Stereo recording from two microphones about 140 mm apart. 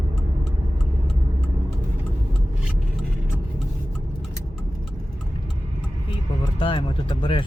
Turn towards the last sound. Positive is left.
turn(degrees=40)  # may be behind; listen again after turning